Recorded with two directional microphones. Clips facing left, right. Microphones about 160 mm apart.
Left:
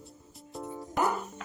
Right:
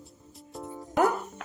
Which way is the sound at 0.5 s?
Centre (ahead or behind).